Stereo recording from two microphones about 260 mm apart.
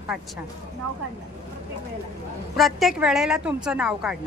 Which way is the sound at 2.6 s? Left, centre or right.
Centre.